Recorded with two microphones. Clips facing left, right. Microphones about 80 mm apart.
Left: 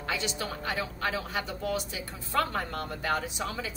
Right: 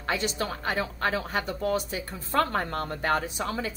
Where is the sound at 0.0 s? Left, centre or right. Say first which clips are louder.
Right 4 dB; right.